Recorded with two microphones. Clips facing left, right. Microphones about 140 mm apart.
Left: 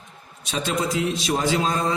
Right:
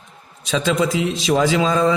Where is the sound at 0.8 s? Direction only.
90° right.